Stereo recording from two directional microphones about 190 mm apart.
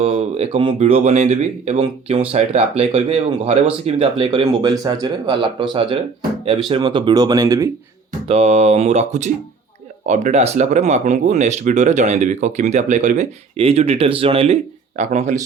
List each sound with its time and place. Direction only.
0.0 s speech: 35° right (ahead or behind)
1.8 s speech: 25° right (ahead or behind)
4.4 s speech: 20° right (ahead or behind)
8.3 s speech: 35° right (ahead or behind)